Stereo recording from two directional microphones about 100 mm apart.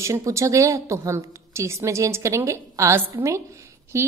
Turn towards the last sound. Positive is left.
turn(degrees=-30)  # may be behind; listen again after turning